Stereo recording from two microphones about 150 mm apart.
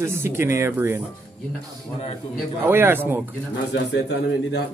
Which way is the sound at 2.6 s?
15° right (ahead or behind).